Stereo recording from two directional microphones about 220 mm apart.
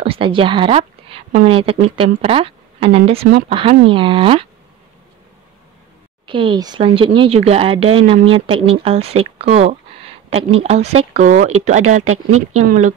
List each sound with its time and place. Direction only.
0.0 s a woman's voice: 25° right (ahead or behind)
6.2 s a woman's voice: 25° right (ahead or behind)